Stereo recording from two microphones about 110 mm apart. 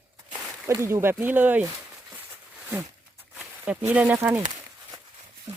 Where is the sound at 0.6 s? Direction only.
25° right (ahead or behind).